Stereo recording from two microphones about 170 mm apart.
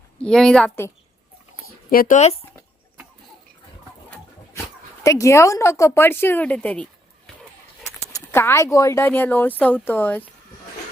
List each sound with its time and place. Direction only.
0.2 s a woman's voice: 5° left (ahead or behind)
1.9 s speech: 55° left (ahead or behind)
5.0 s speech: 20° left (ahead or behind)
8.1 s speech: 15° left (ahead or behind)